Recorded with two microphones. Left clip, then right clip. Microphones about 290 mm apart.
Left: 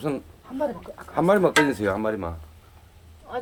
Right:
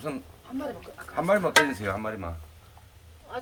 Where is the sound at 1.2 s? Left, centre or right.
Left.